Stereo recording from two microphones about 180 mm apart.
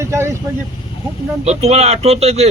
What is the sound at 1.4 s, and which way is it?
Speech, 35° right (ahead or behind).